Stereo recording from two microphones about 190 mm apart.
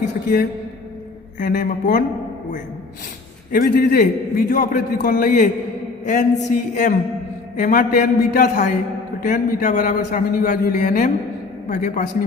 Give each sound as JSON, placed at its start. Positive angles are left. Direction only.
{"t": 1.4, "sound": "a man's voice", "side_deg": 45}
{"t": 3.5, "sound": "a man's voice", "side_deg": 50}